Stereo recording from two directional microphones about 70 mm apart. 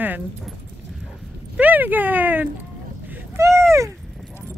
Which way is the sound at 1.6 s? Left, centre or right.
Right.